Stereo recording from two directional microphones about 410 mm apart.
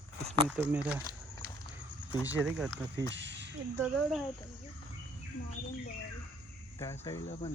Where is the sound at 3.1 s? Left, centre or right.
Right.